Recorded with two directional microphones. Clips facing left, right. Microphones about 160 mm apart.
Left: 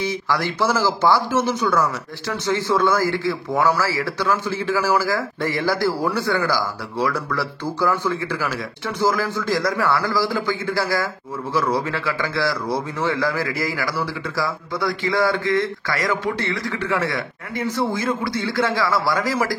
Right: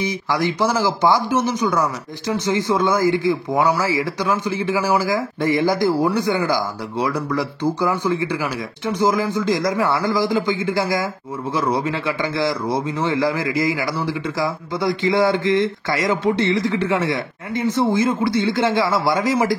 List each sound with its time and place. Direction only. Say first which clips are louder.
0.0 s a man's voice: right 2 dB; 15° right (ahead or behind)